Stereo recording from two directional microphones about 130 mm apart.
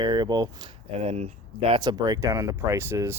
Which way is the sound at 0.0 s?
35° right (ahead or behind).